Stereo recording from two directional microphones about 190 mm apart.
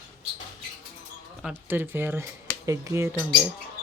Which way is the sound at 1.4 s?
10° right (ahead or behind).